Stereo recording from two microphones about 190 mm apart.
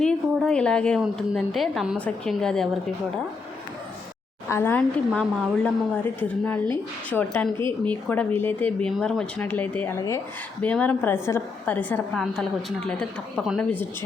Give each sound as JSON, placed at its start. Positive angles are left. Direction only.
{"t": 0.0, "sound": "a woman's voice", "side_deg": 5}
{"t": 4.4, "sound": "a woman's voice", "side_deg": 15}